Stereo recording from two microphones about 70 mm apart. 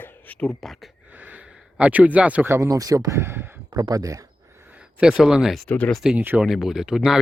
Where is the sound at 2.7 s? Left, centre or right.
Right.